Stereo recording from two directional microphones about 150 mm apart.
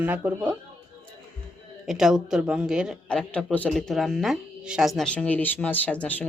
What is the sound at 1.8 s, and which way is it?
Speech, 5° right (ahead or behind).